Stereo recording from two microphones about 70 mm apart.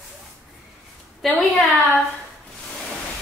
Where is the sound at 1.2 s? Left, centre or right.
Centre.